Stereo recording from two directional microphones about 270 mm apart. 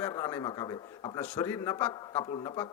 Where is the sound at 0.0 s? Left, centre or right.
Centre.